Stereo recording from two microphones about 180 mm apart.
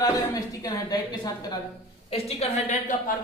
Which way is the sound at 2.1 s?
35° left (ahead or behind).